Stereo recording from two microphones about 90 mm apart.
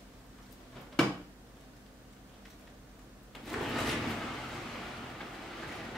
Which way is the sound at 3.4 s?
Centre (ahead or behind).